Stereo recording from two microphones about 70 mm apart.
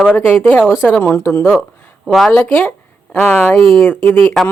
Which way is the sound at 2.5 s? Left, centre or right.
Left.